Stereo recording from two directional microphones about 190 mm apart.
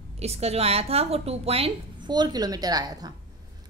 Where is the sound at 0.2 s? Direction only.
35° right (ahead or behind).